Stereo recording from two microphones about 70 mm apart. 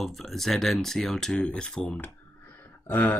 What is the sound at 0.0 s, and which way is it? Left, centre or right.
Speech, centre.